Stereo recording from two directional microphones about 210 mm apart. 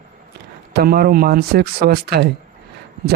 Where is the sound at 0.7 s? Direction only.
45° right (ahead or behind).